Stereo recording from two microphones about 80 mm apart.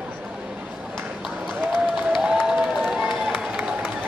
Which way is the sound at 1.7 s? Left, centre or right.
Centre.